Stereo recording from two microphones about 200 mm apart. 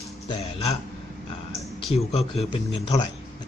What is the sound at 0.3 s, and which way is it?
Speech, 30° left (ahead or behind).